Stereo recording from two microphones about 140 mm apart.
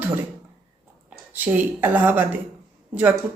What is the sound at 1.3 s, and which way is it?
Speech, 15° right (ahead or behind).